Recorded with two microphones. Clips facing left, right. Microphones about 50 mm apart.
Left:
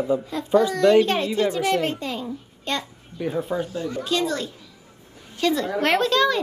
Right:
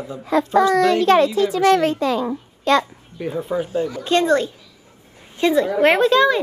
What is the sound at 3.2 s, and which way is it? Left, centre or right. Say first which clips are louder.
Speech: right 1 dB; centre.